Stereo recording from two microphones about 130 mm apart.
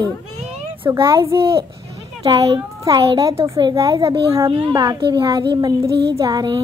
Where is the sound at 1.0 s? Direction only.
40° right (ahead or behind).